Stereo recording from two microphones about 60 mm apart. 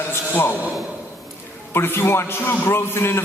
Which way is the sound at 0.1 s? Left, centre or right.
Left.